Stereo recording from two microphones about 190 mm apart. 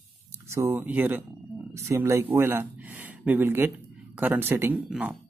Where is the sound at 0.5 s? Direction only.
10° right (ahead or behind).